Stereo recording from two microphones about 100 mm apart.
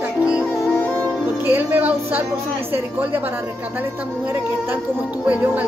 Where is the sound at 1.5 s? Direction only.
20° right (ahead or behind).